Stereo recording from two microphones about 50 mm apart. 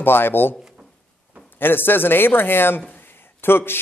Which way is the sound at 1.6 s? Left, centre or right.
Left.